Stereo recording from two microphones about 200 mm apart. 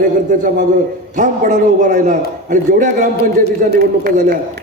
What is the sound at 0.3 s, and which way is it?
A man's voice, 40° right (ahead or behind).